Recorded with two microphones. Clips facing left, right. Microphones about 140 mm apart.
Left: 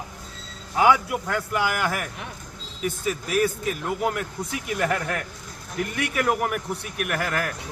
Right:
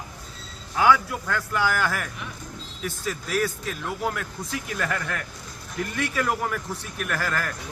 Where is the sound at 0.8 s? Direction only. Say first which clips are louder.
Left 1 dB; 20° left (ahead or behind).